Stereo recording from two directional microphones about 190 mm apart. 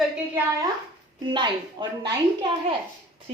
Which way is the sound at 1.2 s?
25° right (ahead or behind).